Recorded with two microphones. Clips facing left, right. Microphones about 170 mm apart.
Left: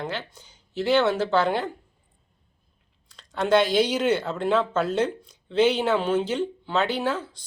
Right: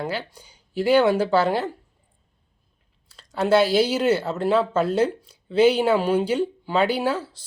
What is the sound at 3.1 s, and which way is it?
Speech, 5° right (ahead or behind).